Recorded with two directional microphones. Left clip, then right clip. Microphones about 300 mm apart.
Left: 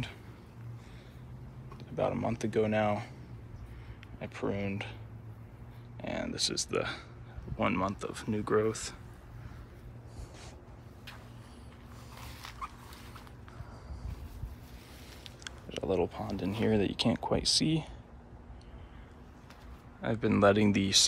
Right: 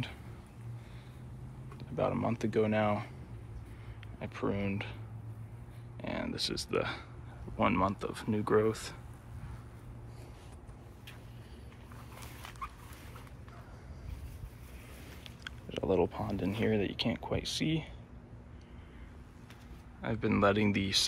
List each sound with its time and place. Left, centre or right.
1.8 s speech: centre
4.2 s speech: centre
5.9 s speech: centre
15.7 s speech: centre
17.4 s speech: left
20.0 s speech: centre